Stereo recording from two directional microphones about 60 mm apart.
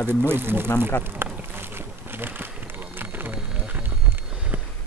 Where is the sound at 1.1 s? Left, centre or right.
Right.